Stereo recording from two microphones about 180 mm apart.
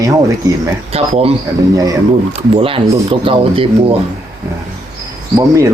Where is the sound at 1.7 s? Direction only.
20° right (ahead or behind).